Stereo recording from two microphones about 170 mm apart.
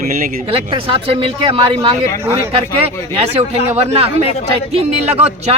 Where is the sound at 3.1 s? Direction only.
35° right (ahead or behind).